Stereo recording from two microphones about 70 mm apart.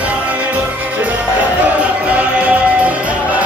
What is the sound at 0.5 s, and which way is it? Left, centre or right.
Music, centre.